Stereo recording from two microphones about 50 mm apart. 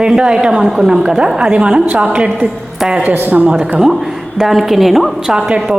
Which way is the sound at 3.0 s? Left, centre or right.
Right.